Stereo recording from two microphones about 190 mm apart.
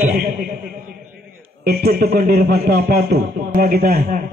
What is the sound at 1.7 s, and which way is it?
Speech, 55° right (ahead or behind).